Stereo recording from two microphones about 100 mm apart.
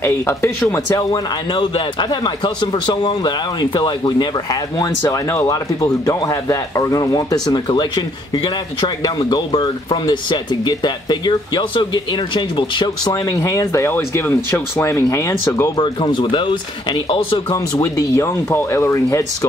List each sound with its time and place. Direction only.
0.0 s speech: 25° left (ahead or behind)
0.8 s speech: 35° left (ahead or behind)
1.5 s a man's voice: 50° left (ahead or behind)
5.1 s speech: 30° left (ahead or behind); by 9.4 s 45° left (ahead or behind)
9.5 s speech: 60° left (ahead or behind)
10.0 s speech: 50° left (ahead or behind); by 15.7 s 30° left (ahead or behind)
15.8 s speech: 55° left (ahead or behind)
17.5 s speech: 35° left (ahead or behind)